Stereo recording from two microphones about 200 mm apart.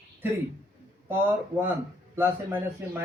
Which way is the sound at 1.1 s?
10° right (ahead or behind).